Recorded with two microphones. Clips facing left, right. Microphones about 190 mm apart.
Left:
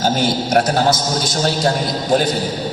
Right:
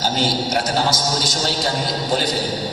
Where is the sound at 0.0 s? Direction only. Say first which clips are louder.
Left 3 dB; 50° left (ahead or behind).